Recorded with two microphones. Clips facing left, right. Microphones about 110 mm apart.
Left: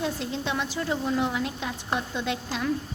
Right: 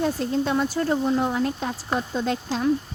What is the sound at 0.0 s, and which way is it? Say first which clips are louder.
Speech: right 6 dB; 45° right (ahead or behind).